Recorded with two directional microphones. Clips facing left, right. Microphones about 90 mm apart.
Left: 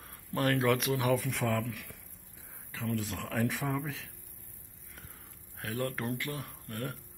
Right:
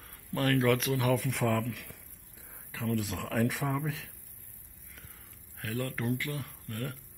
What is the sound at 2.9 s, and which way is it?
Speech, centre (ahead or behind).